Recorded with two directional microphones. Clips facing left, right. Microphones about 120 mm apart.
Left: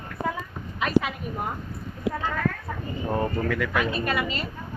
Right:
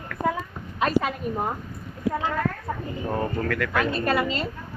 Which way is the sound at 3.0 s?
5° left (ahead or behind).